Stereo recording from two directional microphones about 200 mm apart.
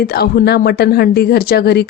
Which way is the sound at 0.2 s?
50° left (ahead or behind).